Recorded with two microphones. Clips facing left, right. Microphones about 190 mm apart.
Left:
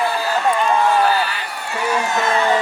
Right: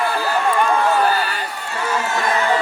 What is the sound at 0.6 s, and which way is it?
Run, 45° right (ahead or behind).